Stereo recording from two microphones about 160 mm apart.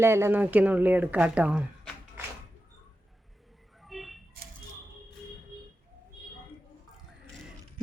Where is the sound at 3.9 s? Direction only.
Centre (ahead or behind).